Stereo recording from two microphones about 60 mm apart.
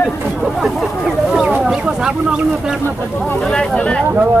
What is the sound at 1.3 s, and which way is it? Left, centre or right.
Speech, centre.